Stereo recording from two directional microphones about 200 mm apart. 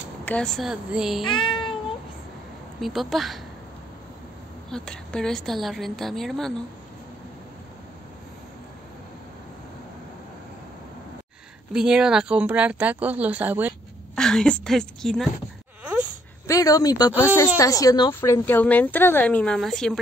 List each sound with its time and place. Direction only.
0.2 s a woman's voice: 5° left (ahead or behind)
1.2 s speech: 25° left (ahead or behind)
2.8 s a woman's voice: centre (ahead or behind)
4.6 s a woman's voice: 5° left (ahead or behind)
11.7 s speech: 5° right (ahead or behind)
14.1 s a woman's voice: 5° left (ahead or behind)
15.8 s a sound: 5° right (ahead or behind)
16.4 s a woman's voice: 15° left (ahead or behind); by 20.0 s centre (ahead or behind)